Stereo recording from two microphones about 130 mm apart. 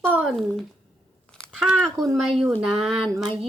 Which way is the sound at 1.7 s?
5° left (ahead or behind).